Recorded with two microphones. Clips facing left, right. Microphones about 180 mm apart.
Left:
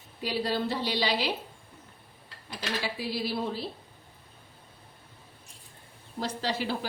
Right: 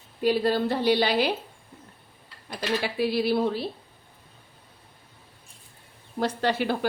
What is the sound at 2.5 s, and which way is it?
Speech, 60° right (ahead or behind).